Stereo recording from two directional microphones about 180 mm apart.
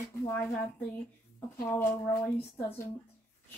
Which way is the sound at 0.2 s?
10° left (ahead or behind).